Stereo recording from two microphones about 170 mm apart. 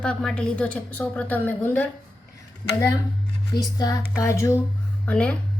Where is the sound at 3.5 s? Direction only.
20° left (ahead or behind).